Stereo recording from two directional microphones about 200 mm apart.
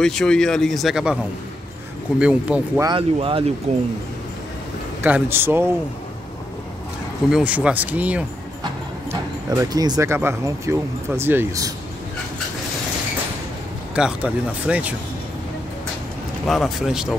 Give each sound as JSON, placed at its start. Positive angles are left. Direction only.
{"t": 0.0, "sound": "speech", "side_deg": 5}
{"t": 2.8, "sound": "speech", "side_deg": -25}
{"t": 5.0, "sound": "speech", "side_deg": -10}
{"t": 7.2, "sound": "speech", "side_deg": -5}
{"t": 13.9, "sound": "speech", "side_deg": -5}
{"t": 16.4, "sound": "speech", "side_deg": 0}